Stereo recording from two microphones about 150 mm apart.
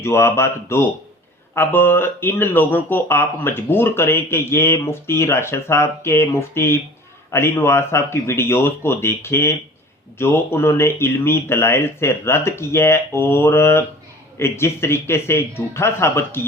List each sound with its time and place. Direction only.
0.0 s speech: 20° left (ahead or behind)